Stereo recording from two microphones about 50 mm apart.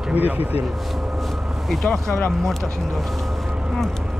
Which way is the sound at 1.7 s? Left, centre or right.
Centre.